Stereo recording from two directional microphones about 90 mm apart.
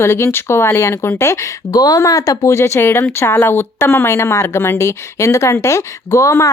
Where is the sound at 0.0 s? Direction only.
30° left (ahead or behind).